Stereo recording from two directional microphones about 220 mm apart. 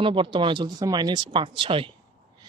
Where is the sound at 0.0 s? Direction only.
25° right (ahead or behind).